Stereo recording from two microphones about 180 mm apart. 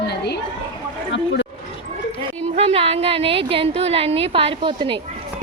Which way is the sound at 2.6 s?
35° right (ahead or behind).